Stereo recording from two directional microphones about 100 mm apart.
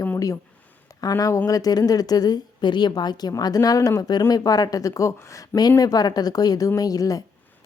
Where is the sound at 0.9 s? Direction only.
35° left (ahead or behind).